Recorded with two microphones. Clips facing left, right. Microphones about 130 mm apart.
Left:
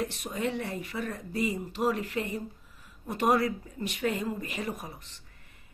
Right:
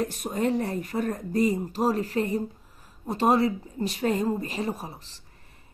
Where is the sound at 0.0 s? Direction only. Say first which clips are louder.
Right 5 dB; 45° right (ahead or behind).